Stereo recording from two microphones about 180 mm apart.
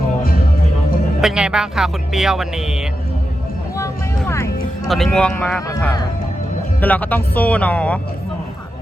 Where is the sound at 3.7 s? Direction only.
15° left (ahead or behind).